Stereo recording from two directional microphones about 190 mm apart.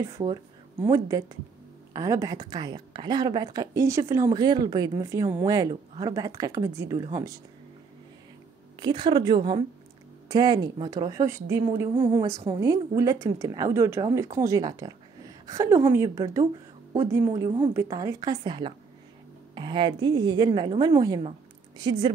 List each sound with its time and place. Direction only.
0.0 s a woman's voice: 25° right (ahead or behind)
8.7 s a woman's voice: 25° right (ahead or behind)